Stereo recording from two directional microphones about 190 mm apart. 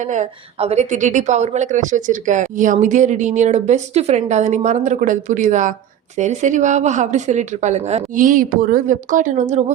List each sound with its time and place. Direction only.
0.0 s a woman's voice: 40° right (ahead or behind)